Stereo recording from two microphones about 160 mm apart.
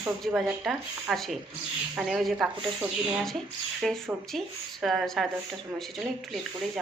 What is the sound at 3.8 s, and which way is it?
Speech, centre (ahead or behind).